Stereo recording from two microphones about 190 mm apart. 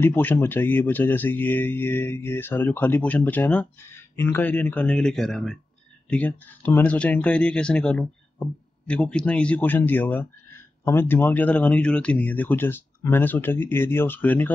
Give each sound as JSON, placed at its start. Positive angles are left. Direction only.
{"t": 0.0, "sound": "speech", "side_deg": 10}